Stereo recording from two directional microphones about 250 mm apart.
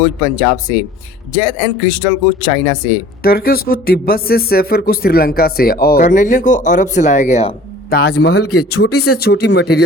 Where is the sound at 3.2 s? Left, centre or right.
Left.